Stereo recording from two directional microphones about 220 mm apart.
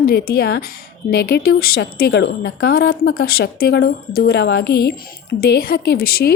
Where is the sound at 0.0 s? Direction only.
45° left (ahead or behind).